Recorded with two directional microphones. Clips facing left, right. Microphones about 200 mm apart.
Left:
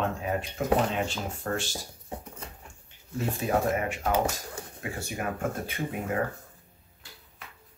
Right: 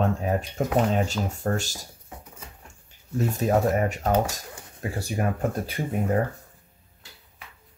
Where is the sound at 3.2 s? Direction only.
40° right (ahead or behind).